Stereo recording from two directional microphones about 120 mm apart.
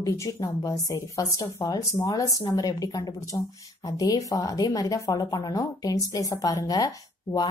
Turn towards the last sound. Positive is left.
turn(degrees=30)  # may be behind; listen again after turning